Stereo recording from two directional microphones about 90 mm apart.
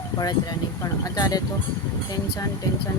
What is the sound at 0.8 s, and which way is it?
Speech, 40° left (ahead or behind).